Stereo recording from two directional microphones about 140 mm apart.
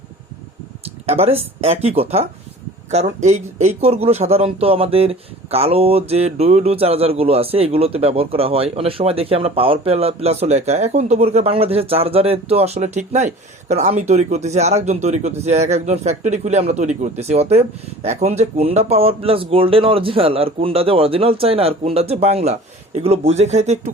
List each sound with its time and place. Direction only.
1.0 s speech: 45° right (ahead or behind)